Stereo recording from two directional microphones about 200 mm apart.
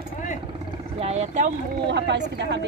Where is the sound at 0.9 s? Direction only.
30° right (ahead or behind).